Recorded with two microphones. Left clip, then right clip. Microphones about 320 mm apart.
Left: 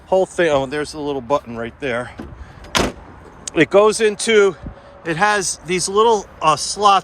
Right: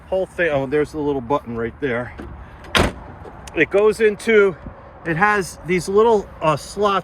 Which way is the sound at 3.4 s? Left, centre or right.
Left.